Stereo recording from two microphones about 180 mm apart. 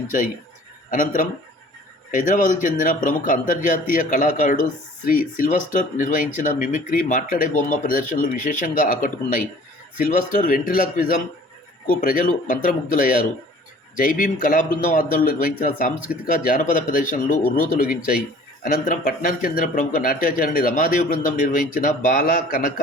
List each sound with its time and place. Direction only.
0.9 s speech: 50° left (ahead or behind)